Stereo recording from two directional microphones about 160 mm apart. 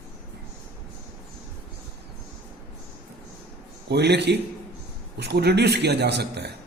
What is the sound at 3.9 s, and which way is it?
A man's voice, 90° right.